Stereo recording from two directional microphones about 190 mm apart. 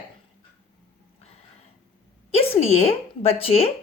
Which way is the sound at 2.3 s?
30° left (ahead or behind).